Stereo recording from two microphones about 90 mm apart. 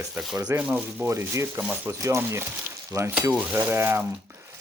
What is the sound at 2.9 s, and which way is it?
Speech, 30° right (ahead or behind).